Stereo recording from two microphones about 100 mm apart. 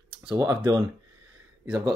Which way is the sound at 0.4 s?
35° right (ahead or behind).